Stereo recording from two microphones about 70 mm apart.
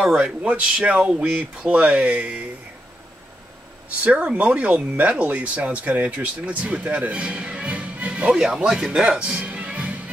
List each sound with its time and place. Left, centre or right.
0.0 s speech: centre
4.0 s speech: centre